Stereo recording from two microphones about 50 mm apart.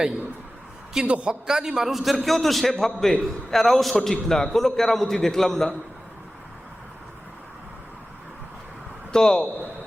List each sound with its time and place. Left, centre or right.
1.0 s a man's voice: right; by 5.6 s centre
9.1 s a man's voice: centre